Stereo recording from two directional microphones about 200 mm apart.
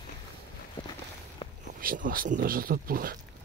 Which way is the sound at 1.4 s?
25° left (ahead or behind).